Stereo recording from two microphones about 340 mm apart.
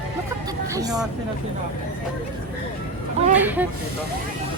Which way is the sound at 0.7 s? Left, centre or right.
Centre.